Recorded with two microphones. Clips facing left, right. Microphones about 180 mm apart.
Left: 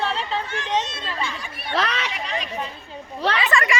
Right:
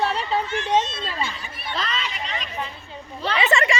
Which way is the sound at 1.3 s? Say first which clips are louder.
Left 5 dB; 65° left (ahead or behind).